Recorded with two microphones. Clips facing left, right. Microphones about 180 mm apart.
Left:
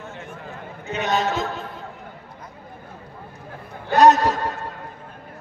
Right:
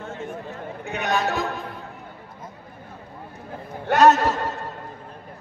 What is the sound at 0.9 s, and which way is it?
Speech, 20° left (ahead or behind).